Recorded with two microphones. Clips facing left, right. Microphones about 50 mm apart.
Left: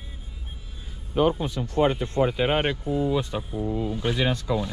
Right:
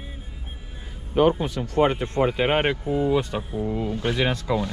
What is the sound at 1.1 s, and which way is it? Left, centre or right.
A man's voice, right.